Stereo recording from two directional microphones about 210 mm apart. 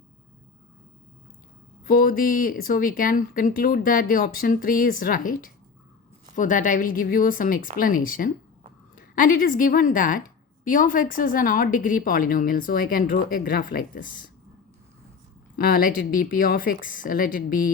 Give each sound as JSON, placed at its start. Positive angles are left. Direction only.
{"t": 1.8, "sound": "a woman's voice", "side_deg": 45}
{"t": 15.5, "sound": "speech", "side_deg": 45}